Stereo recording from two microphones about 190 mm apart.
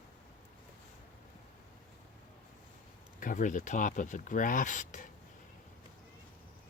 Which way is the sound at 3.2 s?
45° left (ahead or behind).